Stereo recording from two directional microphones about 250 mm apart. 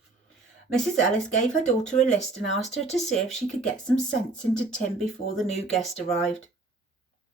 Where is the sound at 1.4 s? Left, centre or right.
Left.